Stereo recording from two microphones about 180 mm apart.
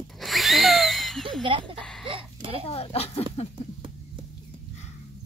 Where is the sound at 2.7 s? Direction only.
35° left (ahead or behind).